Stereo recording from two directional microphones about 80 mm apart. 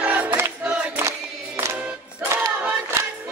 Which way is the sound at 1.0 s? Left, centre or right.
Right.